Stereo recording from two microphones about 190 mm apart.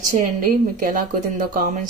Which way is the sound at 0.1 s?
45° right (ahead or behind).